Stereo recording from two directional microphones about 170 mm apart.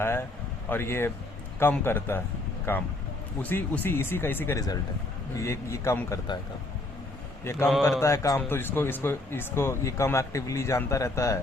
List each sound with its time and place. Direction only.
0.0 s speech: 15° left (ahead or behind)
8.0 s speech: 20° left (ahead or behind)